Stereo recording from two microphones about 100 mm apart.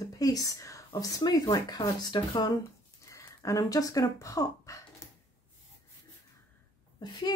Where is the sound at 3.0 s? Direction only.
30° left (ahead or behind).